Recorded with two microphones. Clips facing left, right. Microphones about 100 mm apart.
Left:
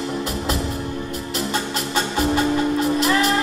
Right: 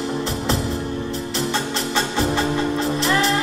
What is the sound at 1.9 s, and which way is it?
Music, 30° right (ahead or behind).